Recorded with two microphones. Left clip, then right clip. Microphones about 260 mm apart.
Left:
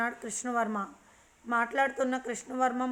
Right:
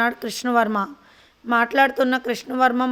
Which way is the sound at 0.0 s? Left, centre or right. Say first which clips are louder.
Right 11 dB; right.